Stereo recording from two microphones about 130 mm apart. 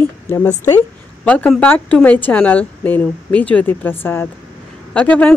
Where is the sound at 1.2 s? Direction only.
10° left (ahead or behind).